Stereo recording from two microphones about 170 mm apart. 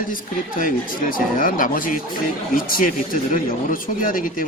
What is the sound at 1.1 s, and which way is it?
A man's voice, 55° left (ahead or behind).